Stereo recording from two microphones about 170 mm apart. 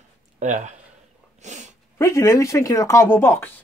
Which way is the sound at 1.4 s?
45° right (ahead or behind).